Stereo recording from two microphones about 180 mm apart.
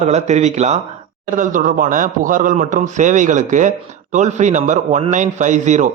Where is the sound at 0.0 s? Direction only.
40° right (ahead or behind).